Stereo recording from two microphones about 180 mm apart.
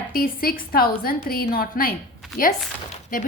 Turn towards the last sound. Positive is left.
turn(degrees=50)  # may be behind; listen again after turning